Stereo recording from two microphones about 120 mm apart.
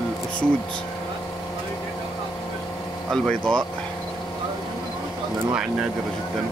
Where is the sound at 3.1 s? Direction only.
5° left (ahead or behind).